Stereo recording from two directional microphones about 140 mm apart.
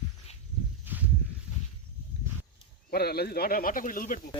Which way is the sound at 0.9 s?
15° right (ahead or behind).